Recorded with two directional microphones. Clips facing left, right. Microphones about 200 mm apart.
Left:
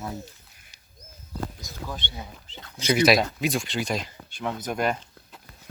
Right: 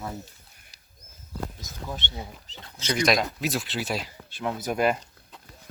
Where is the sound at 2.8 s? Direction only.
10° left (ahead or behind).